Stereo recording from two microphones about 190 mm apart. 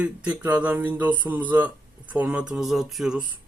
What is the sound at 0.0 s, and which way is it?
Speech, 5° right (ahead or behind).